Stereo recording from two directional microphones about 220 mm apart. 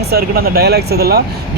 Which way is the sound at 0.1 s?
45° right (ahead or behind).